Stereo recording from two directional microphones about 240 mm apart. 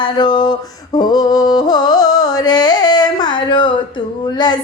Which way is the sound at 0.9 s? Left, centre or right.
Centre.